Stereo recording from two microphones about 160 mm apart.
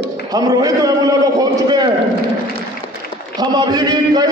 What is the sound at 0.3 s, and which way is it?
A man's voice, 25° right (ahead or behind).